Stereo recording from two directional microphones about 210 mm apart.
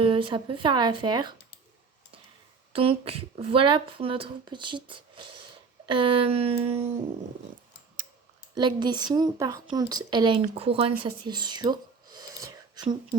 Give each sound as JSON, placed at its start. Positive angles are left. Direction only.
{"t": 0.0, "sound": "speech", "side_deg": -25}
{"t": 2.7, "sound": "speech", "side_deg": -25}
{"t": 8.5, "sound": "speech", "side_deg": -20}